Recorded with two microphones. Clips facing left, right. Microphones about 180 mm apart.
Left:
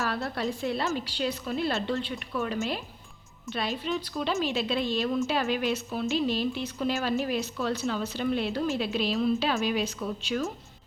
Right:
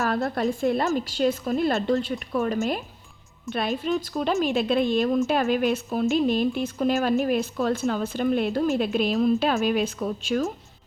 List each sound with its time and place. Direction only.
0.1 s a woman's voice: 50° right (ahead or behind)